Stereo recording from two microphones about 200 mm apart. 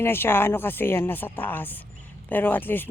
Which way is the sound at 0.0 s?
10° left (ahead or behind).